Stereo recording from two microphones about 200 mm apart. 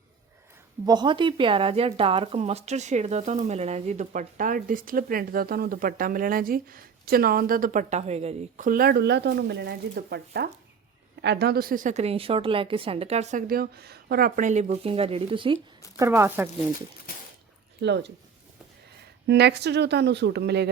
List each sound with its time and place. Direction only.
0.9 s speech: 20° right (ahead or behind)
13.5 s speech: 50° right (ahead or behind); by 15.5 s 25° right (ahead or behind)
16.0 s speech: 15° right (ahead or behind)
17.7 s speech: 60° right (ahead or behind)
19.3 s speech: 55° right (ahead or behind)